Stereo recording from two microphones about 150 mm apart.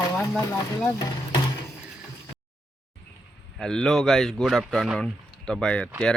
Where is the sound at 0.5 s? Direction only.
20° left (ahead or behind).